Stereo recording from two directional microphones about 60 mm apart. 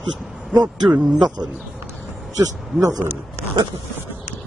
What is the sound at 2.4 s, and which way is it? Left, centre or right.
Speech, right.